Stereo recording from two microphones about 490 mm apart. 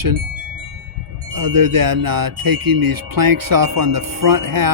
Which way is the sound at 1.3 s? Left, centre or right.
Right.